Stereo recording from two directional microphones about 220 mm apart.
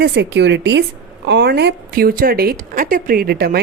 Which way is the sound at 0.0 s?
50° right (ahead or behind).